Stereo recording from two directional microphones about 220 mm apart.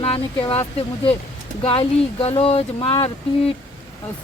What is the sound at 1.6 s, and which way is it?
Speech, 25° left (ahead or behind).